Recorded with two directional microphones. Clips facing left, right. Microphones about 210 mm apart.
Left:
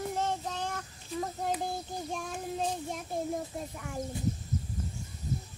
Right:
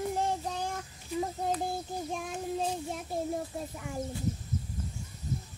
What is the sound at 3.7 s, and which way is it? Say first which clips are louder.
Speech: right 1 dB; 5° right (ahead or behind).